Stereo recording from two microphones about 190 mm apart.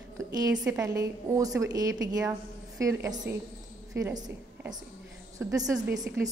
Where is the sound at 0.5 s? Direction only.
5° right (ahead or behind).